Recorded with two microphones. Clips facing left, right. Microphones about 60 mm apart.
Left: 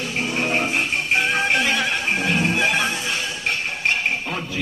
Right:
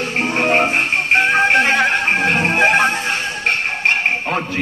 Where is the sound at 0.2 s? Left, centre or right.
Right.